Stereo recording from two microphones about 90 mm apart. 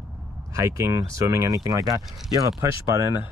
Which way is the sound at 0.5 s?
35° right (ahead or behind).